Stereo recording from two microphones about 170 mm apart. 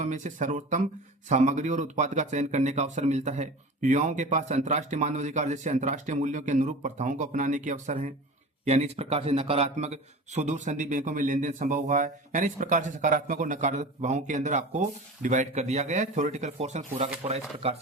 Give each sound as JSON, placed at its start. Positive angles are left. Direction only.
{"t": 0.0, "sound": "a man's voice", "side_deg": -45}